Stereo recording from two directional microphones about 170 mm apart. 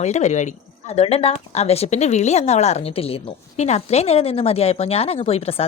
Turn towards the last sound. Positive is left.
turn(degrees=35)  # may be behind; listen again after turning